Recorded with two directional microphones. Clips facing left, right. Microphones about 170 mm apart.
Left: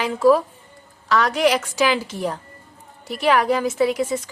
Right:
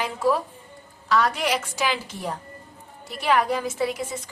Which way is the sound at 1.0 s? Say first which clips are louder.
Left 4 dB; 90° left.